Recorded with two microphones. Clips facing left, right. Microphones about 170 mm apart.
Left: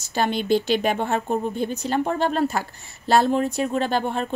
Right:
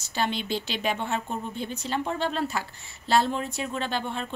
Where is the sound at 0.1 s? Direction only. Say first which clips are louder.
Left 7 dB; 45° left (ahead or behind).